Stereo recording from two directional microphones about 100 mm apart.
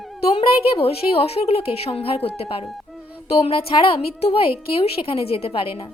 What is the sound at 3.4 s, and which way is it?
Speech, 65° left (ahead or behind).